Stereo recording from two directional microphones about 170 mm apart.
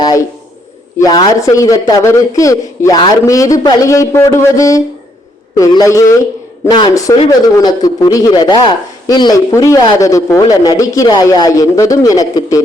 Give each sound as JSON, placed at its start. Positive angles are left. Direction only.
{"t": 0.0, "sound": "speech", "side_deg": 20}